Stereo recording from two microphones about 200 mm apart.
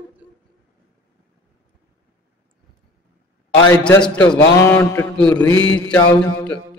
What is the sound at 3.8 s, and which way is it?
Mantra, 5° left (ahead or behind).